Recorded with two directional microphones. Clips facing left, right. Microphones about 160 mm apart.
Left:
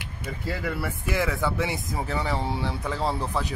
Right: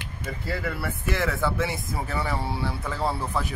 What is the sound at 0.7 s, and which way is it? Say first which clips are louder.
Speech: left 1 dB; 10° left (ahead or behind).